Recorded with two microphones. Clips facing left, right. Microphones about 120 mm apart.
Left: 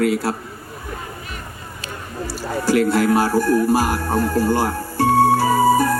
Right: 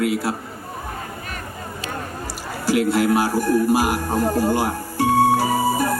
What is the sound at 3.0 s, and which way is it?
A man's voice, 40° left (ahead or behind).